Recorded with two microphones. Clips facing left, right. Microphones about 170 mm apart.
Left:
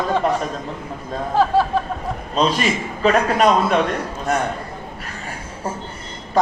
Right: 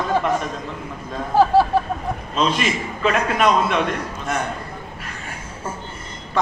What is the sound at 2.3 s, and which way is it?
A man's voice, 40° left (ahead or behind).